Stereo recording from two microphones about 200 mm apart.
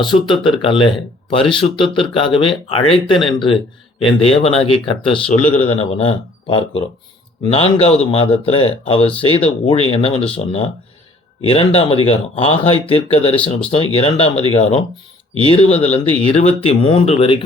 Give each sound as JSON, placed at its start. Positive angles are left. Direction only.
{"t": 0.0, "sound": "speech", "side_deg": 25}